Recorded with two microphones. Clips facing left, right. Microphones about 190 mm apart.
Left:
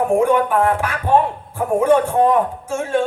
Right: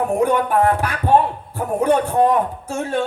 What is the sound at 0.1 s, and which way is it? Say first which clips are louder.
A man's voice: left 2 dB; 40° right (ahead or behind).